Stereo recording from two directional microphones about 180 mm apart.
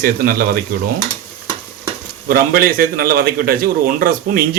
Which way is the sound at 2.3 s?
55° right (ahead or behind).